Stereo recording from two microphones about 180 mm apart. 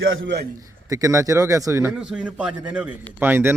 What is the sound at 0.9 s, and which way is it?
Speech, 15° right (ahead or behind).